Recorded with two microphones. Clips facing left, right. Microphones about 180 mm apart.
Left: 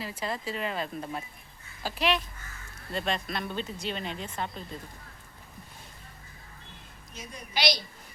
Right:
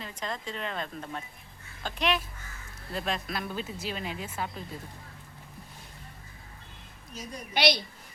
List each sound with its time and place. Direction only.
0.0 s speech: 5° left (ahead or behind)
7.2 s a woman's voice: 40° right (ahead or behind)
7.5 s a woman's voice: 55° right (ahead or behind)